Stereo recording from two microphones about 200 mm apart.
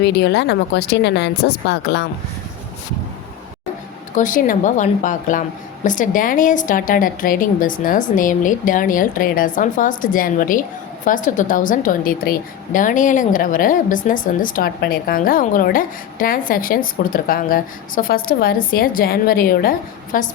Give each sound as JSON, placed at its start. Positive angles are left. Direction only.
{"t": 0.0, "sound": "speech", "side_deg": 60}
{"t": 4.1, "sound": "a woman's voice", "side_deg": 40}